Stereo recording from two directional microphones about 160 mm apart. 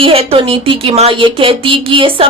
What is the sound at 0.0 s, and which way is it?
Speech, 35° right (ahead or behind).